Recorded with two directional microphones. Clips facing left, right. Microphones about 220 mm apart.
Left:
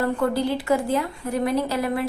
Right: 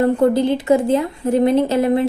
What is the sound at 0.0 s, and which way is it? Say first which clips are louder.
A woman's voice: right 8 dB; 20° right (ahead or behind).